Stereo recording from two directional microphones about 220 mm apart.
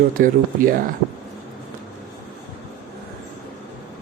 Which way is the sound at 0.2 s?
45° right (ahead or behind).